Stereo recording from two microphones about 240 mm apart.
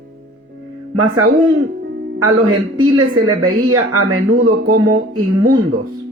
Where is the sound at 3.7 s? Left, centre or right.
Right.